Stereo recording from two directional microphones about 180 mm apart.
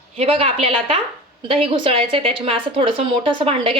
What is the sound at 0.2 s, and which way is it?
A woman's voice, 35° right (ahead or behind).